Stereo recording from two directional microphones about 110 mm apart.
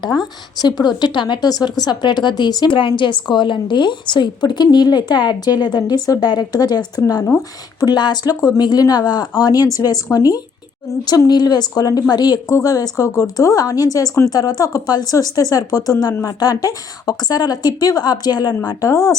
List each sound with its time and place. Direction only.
0.0 s a woman's voice: 40° left (ahead or behind)